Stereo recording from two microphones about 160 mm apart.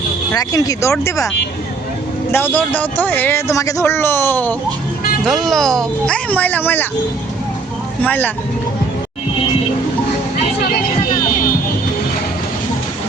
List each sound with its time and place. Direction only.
0.3 s speech: 20° left (ahead or behind)
2.3 s speech: 10° left (ahead or behind)
5.2 s speech: centre (ahead or behind)
8.0 s speech: 10° left (ahead or behind)